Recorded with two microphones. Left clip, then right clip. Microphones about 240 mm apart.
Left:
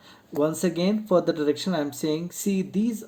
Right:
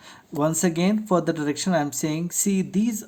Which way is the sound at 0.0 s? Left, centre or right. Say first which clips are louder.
Even; right.